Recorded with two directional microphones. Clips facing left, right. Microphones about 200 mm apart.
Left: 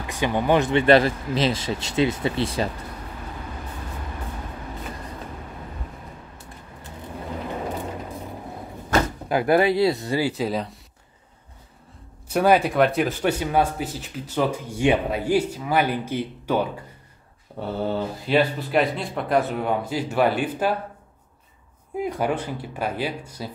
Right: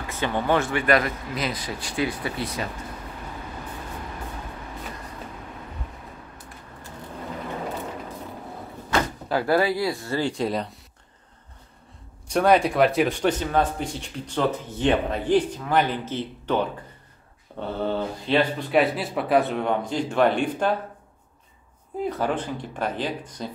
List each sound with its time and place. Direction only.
0.0 s speech: 15° left (ahead or behind)
9.3 s speech: 20° left (ahead or behind)
10.2 s speech: 5° left (ahead or behind)
12.3 s speech: 5° left (ahead or behind)
22.0 s speech: 10° left (ahead or behind)